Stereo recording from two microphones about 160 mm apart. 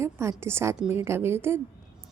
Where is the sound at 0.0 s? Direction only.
15° right (ahead or behind).